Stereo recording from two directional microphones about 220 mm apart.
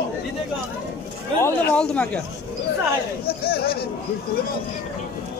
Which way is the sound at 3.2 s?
45° left (ahead or behind).